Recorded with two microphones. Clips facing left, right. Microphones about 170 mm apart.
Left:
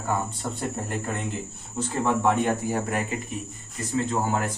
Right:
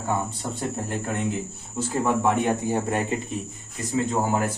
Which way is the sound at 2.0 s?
10° right (ahead or behind).